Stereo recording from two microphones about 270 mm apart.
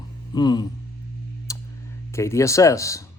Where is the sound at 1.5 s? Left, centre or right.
Centre.